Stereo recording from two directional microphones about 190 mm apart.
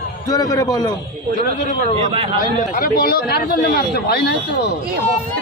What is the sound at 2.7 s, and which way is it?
Speech, 50° left (ahead or behind).